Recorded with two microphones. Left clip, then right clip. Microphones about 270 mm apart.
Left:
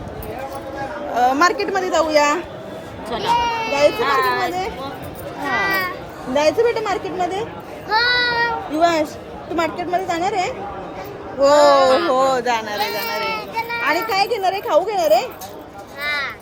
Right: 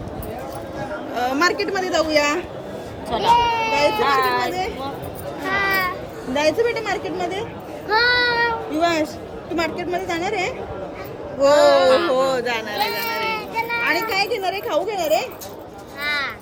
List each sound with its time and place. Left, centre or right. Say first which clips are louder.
1.1 s a woman's voice: left 4 dB; centre
3.1 s speech: right 2 dB; right
5.5 s chatter: even; centre
6.3 s a woman's voice: left 3 dB; centre
7.9 s child singing: even; centre
8.7 s a woman's voice: left 3 dB; centre
11.7 s speech: left 1 dB; centre
12.1 s speech: left 3 dB; centre
12.7 s a sound: left 1 dB; centre
13.8 s a woman's voice: left 4 dB; centre
16.0 s a sound: left 1 dB; centre